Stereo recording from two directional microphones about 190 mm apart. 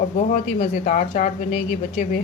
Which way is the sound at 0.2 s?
40° left (ahead or behind).